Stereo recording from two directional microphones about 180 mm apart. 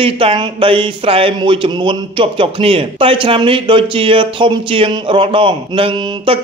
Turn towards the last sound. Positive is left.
turn(degrees=-30)  # may be behind; listen again after turning